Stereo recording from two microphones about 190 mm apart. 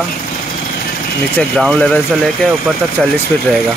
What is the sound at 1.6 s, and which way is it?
Speech, 5° left (ahead or behind).